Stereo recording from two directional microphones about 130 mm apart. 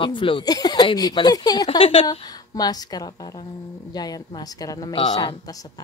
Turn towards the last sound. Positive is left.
turn(degrees=35)  # may be behind; listen again after turning